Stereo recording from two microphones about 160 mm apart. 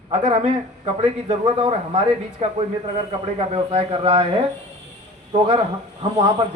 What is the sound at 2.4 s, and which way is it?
A man's voice, 45° right (ahead or behind).